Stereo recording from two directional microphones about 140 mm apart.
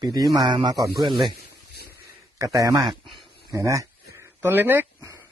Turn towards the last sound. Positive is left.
turn(degrees=-15)  # may be behind; listen again after turning